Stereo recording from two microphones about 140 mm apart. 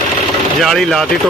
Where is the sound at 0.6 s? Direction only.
Centre (ahead or behind).